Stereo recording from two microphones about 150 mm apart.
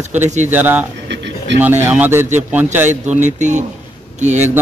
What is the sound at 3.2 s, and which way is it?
Speech, 55° right (ahead or behind).